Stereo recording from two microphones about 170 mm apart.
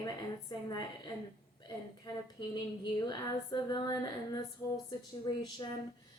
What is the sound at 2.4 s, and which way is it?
A woman's voice, 25° left (ahead or behind).